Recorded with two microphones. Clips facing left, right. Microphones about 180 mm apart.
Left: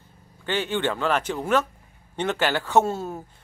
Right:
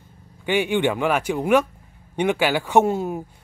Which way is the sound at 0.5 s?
15° right (ahead or behind).